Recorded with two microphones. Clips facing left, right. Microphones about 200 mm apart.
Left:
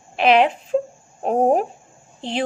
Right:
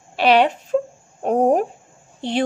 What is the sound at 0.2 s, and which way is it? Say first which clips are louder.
A child's voice: even; 40° right (ahead or behind).